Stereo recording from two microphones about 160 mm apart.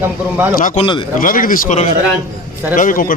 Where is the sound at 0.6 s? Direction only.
50° left (ahead or behind).